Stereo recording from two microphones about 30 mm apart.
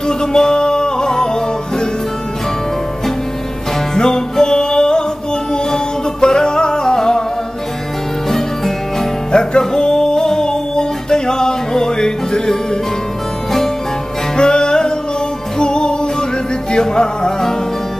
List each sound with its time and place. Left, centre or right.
0.2 s music: left
3.9 s music: left
6.2 s music: left
9.3 s music: left
14.3 s music: left